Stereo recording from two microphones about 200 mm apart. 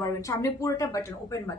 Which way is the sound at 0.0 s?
15° left (ahead or behind).